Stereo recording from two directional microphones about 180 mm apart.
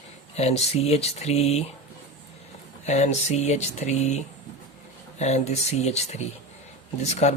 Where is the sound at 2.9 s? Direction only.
40° left (ahead or behind).